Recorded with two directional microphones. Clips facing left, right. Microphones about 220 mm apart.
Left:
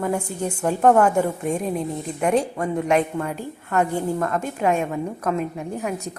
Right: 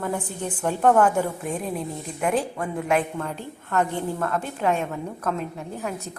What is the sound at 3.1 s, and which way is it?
A woman's voice, 10° left (ahead or behind).